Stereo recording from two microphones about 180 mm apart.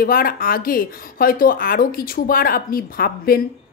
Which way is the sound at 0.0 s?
55° left (ahead or behind).